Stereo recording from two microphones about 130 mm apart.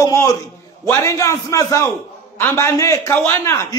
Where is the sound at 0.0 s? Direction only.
25° left (ahead or behind).